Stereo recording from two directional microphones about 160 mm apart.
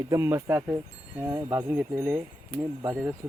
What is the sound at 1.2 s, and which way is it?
Speech, 25° right (ahead or behind).